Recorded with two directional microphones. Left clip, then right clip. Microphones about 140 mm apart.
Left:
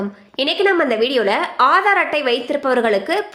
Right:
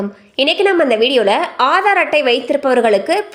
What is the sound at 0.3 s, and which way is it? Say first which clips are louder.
A woman's voice: right 3 dB; 20° right (ahead or behind).